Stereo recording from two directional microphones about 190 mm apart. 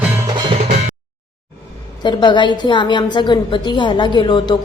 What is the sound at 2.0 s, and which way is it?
A woman's voice, 25° left (ahead or behind).